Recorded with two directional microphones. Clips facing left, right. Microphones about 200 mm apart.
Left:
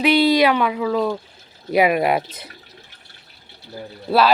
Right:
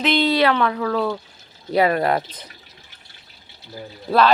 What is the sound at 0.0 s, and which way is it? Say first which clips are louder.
Speech: left 3 dB; 10° left (ahead or behind).